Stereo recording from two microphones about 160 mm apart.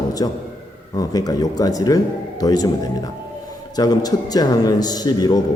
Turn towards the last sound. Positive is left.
turn(degrees=25)  # may be behind; listen again after turning